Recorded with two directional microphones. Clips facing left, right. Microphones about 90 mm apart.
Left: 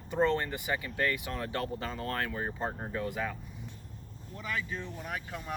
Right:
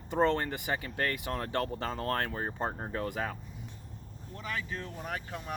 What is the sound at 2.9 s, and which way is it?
Speech, 45° right (ahead or behind).